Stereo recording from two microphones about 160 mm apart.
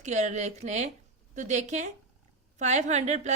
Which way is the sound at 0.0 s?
45° right (ahead or behind).